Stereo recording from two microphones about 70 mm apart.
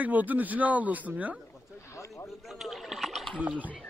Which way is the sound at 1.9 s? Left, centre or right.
Left.